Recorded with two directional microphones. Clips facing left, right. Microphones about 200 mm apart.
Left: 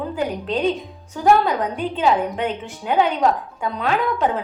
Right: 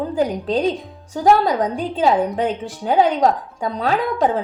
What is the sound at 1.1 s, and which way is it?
Speech, 35° right (ahead or behind).